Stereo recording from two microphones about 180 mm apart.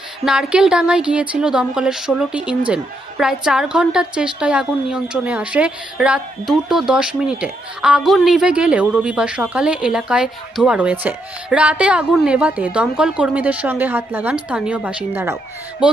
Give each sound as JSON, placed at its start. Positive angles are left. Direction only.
{"t": 0.3, "sound": "a woman's voice", "side_deg": -5}